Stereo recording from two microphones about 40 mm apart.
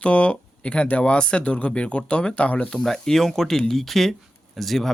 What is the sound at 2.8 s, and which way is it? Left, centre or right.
Speech, centre.